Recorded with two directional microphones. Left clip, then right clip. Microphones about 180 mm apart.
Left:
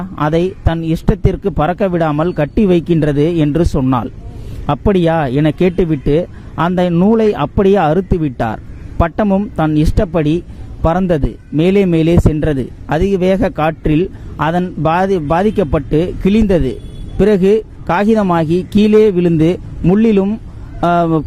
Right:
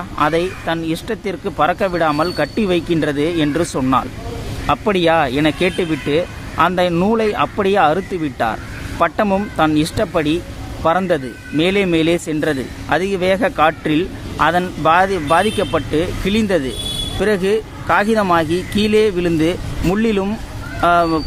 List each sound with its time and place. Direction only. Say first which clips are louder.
0.2 s speech: left 1 dB; 45° left (ahead or behind)